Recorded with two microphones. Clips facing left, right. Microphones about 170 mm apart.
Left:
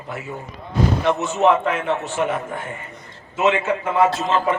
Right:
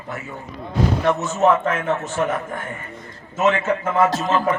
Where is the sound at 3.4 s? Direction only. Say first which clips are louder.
Even; 15° left (ahead or behind).